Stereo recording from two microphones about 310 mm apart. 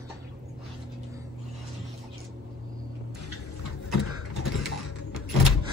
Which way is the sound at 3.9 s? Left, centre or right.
Left.